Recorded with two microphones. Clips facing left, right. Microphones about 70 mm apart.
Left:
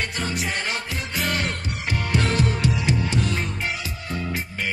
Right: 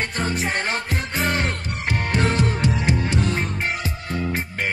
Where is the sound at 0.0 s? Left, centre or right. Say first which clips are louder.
Right 3 dB; right.